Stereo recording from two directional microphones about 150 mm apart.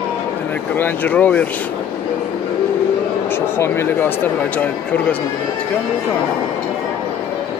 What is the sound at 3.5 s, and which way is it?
Speech, 15° left (ahead or behind).